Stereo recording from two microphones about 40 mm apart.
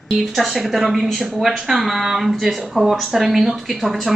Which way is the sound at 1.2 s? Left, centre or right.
Centre.